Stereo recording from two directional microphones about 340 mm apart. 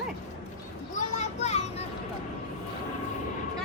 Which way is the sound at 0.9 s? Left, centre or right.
Centre.